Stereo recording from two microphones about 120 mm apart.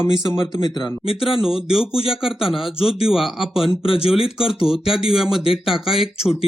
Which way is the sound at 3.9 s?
50° left (ahead or behind).